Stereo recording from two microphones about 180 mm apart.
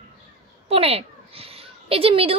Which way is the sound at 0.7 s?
35° right (ahead or behind).